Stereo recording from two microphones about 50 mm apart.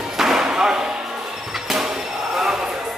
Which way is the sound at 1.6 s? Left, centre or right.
Centre.